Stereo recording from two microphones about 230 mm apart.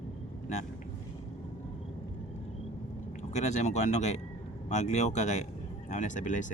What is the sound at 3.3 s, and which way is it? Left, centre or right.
A man's voice, left.